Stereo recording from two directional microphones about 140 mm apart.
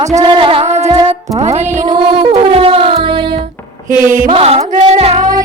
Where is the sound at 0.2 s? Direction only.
35° right (ahead or behind); by 1.9 s 55° right (ahead or behind).